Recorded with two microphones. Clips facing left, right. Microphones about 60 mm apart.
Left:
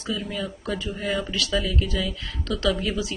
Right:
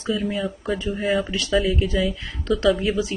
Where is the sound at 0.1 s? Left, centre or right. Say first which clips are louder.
Right 5 dB; centre.